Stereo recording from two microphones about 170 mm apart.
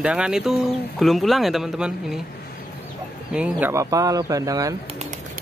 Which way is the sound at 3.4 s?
10° right (ahead or behind).